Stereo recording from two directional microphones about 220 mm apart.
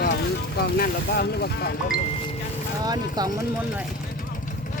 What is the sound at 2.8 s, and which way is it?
Speech, 15° right (ahead or behind).